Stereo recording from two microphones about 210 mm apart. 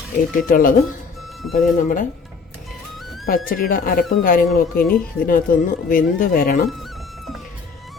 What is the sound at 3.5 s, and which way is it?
Speech, 45° left (ahead or behind).